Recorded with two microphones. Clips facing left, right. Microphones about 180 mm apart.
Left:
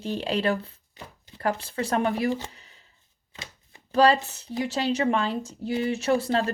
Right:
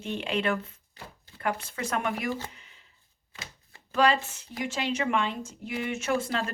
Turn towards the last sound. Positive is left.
turn(degrees=35)  # may be behind; listen again after turning